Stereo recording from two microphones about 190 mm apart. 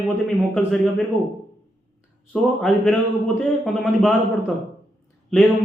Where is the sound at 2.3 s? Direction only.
5° left (ahead or behind).